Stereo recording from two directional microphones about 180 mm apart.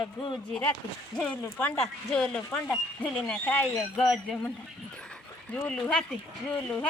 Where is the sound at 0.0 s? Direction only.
25° left (ahead or behind).